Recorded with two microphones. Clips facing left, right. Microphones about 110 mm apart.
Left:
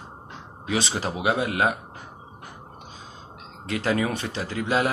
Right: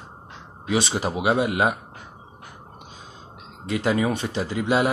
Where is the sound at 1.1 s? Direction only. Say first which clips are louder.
Right 3 dB; 20° right (ahead or behind).